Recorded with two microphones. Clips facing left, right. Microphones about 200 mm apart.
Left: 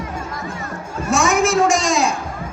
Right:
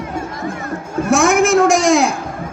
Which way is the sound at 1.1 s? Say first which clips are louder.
Right 4 dB; 55° right (ahead or behind).